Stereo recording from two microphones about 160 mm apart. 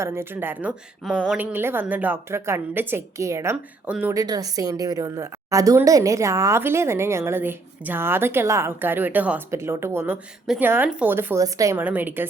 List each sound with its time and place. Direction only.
0.0 s a woman's voice: 15° right (ahead or behind)
10.4 s a woman's voice: 5° right (ahead or behind)